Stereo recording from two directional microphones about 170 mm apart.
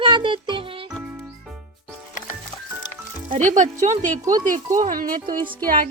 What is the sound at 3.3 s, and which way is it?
Speech, 45° right (ahead or behind).